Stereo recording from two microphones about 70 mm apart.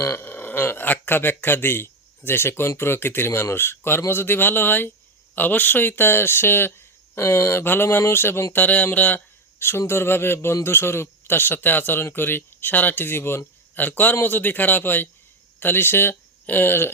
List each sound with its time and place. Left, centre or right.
0.2 s speech: left
8.5 s speech: left